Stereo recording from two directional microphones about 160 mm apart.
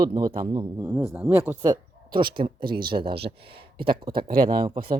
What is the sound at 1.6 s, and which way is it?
Speech, 25° right (ahead or behind).